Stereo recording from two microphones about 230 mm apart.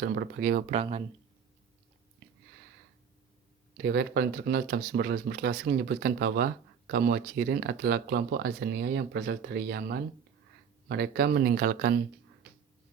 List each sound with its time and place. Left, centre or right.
0.0 s speech: right
0.8 s speech: right
3.8 s speech: right